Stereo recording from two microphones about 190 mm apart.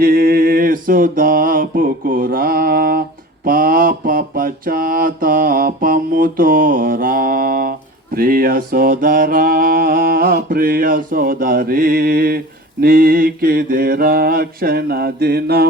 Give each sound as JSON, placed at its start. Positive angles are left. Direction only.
{"t": 0.0, "sound": "mantra", "side_deg": -50}